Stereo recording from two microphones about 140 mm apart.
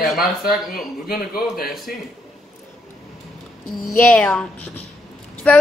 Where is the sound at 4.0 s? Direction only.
5° left (ahead or behind).